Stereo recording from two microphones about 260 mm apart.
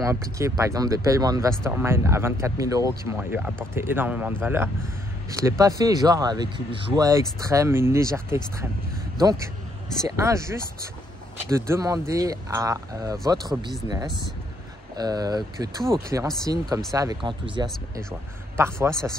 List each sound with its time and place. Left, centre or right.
0.0 s speech: centre
10.0 s speech: centre